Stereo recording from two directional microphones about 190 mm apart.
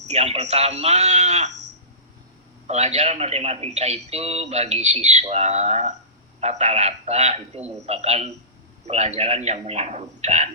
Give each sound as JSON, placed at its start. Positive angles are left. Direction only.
{"t": 0.1, "sound": "a man's voice", "side_deg": -35}
{"t": 2.6, "sound": "a man's voice", "side_deg": -35}